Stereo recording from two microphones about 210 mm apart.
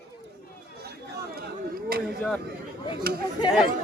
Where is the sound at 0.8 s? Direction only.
50° right (ahead or behind).